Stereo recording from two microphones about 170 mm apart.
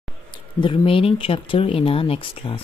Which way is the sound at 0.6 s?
30° left (ahead or behind).